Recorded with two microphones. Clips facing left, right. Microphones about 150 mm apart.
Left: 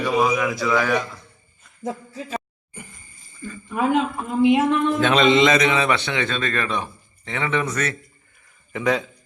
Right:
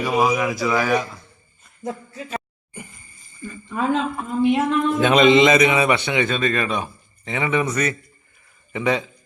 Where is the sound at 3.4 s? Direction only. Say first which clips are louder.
Even; 20° right (ahead or behind).